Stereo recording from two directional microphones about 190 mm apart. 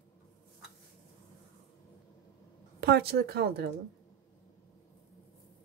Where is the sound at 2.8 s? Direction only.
60° right (ahead or behind).